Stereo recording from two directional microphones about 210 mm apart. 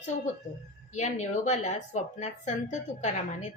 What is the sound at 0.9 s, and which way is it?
Speech, 35° left (ahead or behind).